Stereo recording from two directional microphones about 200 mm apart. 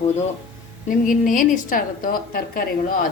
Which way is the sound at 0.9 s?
40° left (ahead or behind).